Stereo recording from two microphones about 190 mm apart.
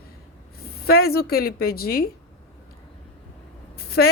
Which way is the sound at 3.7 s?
55° left (ahead or behind).